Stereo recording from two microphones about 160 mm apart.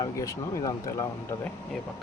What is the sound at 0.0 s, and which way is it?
Speech, 20° left (ahead or behind).